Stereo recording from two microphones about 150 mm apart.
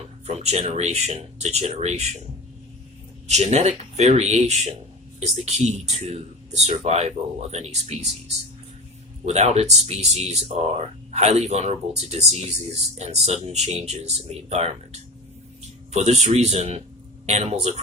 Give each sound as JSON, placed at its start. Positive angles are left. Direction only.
{"t": 0.3, "sound": "speech", "side_deg": -45}
{"t": 3.2, "sound": "speech", "side_deg": -50}
{"t": 9.2, "sound": "speech", "side_deg": -50}